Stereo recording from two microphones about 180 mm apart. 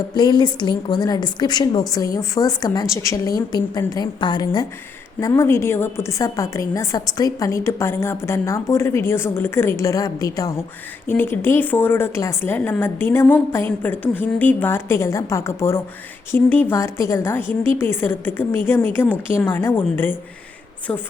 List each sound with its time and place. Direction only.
0.1 s a woman's voice: 25° left (ahead or behind)